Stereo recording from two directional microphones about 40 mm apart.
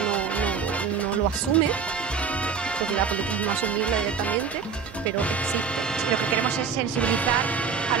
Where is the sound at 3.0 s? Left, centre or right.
Left.